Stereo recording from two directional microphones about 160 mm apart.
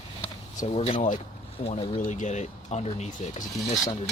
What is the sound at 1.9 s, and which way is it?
Speech, 50° left (ahead or behind).